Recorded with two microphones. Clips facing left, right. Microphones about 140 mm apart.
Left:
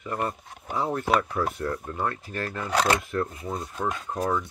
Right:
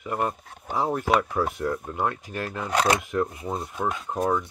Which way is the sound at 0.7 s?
10° right (ahead or behind).